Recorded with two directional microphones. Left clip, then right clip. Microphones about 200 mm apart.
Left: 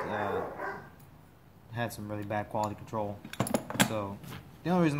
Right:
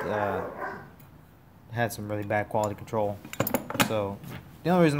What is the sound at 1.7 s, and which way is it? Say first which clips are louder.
Speech: right 6 dB; 30° right (ahead or behind).